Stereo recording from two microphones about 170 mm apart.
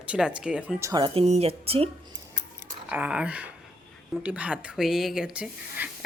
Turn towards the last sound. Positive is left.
turn(degrees=-5)  # may be behind; listen again after turning